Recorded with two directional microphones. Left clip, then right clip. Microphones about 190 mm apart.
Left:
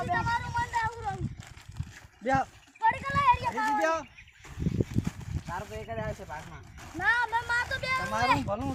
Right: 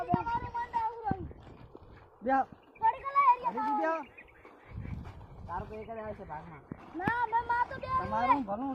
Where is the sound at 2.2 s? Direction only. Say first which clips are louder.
Left 1 dB; 50° left (ahead or behind).